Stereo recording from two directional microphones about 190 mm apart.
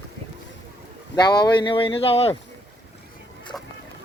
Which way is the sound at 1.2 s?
20° left (ahead or behind).